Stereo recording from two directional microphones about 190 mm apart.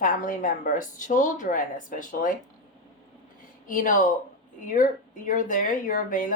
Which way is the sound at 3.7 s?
45° left (ahead or behind).